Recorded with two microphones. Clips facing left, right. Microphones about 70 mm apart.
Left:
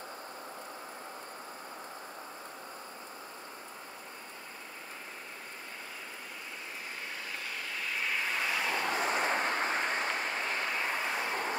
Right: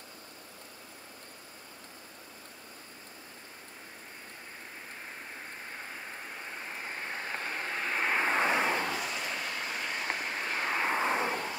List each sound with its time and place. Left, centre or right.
6.8 s vehicle: right
8.9 s vehicle: left
10.6 s vehicle: right